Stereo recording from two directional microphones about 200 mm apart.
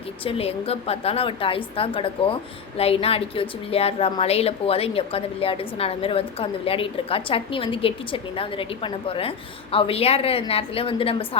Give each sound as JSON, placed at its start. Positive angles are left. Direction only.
{"t": 0.3, "sound": "a woman's voice", "side_deg": 30}